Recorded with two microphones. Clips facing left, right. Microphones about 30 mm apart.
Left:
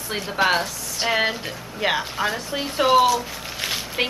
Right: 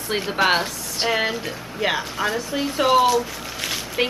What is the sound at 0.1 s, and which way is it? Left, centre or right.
Speech, centre.